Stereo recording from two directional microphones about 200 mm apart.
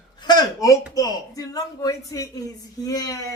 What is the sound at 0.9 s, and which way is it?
A woman's voice, 20° left (ahead or behind).